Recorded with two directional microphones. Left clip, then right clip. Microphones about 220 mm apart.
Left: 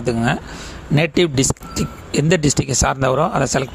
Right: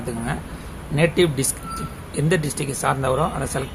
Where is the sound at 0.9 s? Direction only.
35° left (ahead or behind).